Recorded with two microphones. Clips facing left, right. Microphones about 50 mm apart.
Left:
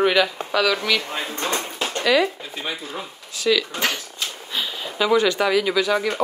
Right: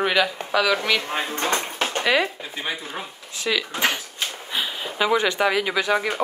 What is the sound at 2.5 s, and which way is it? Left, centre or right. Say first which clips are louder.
Speech: even; centre.